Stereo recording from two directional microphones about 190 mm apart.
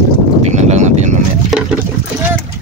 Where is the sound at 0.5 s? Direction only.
35° right (ahead or behind).